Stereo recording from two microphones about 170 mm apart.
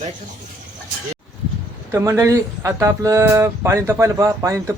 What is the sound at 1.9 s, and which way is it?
Speech, 15° right (ahead or behind).